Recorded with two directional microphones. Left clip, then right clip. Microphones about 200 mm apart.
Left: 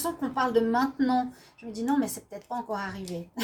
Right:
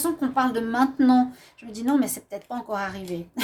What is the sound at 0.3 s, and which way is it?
Speech, 50° right (ahead or behind).